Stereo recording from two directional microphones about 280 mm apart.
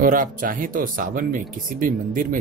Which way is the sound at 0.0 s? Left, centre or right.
Right.